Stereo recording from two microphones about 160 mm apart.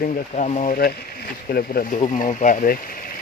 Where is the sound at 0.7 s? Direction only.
70° left (ahead or behind).